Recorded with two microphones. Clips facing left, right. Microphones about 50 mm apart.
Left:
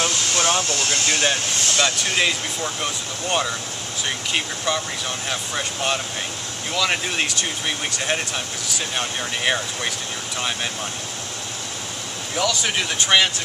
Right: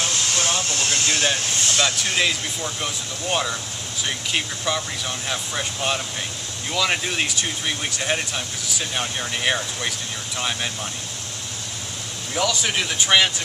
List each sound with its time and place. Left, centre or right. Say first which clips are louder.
0.0 s vehicle: left 3 dB; left
0.8 s speech: right 1 dB; centre
12.4 s speech: even; centre